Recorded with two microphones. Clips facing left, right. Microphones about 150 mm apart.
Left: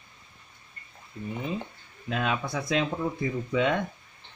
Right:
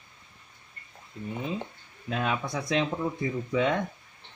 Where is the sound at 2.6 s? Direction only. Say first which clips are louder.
Even; 10° right (ahead or behind).